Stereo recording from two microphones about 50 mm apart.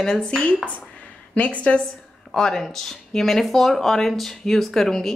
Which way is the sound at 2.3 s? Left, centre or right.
Centre.